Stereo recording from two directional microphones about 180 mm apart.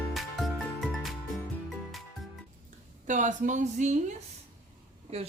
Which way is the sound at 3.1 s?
45° right (ahead or behind).